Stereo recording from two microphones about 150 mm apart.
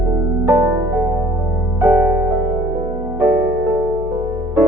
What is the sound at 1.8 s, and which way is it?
Music, 10° right (ahead or behind).